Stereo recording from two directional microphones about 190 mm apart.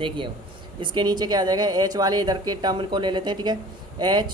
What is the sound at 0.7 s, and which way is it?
Speech, 25° right (ahead or behind).